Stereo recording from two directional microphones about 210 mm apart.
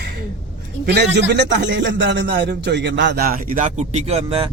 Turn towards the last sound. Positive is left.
turn(degrees=-30)  # may be behind; listen again after turning